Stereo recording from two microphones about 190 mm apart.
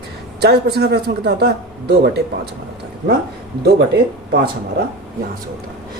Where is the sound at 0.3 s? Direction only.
60° right (ahead or behind).